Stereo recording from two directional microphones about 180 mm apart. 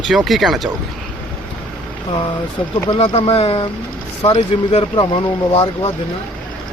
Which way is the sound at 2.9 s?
30° left (ahead or behind).